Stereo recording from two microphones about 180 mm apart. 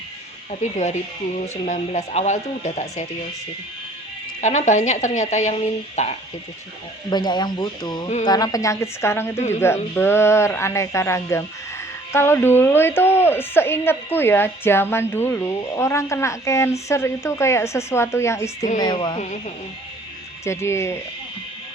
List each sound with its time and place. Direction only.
0.6 s speech: 40° left (ahead or behind)
4.4 s speech: 40° left (ahead or behind)
7.1 s a woman's voice: 25° left (ahead or behind)
20.4 s a woman's voice: 15° left (ahead or behind)